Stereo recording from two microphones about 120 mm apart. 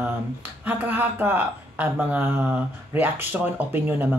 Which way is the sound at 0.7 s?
15° right (ahead or behind).